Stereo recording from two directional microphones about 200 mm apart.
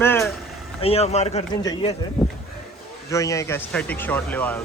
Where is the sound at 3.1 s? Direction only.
15° left (ahead or behind).